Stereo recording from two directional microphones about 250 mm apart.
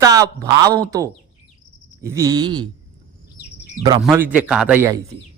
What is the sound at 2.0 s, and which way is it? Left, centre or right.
Speech, centre.